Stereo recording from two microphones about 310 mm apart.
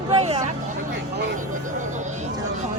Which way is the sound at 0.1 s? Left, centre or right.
Centre.